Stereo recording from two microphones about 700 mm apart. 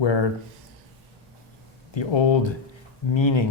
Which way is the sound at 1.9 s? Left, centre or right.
Left.